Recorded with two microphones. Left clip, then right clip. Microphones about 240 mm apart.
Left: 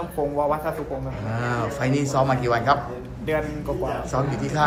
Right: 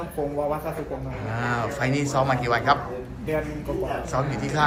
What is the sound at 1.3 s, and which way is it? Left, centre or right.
A man's voice, centre.